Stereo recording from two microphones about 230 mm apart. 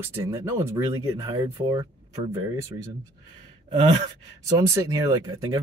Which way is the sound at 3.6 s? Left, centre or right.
Right.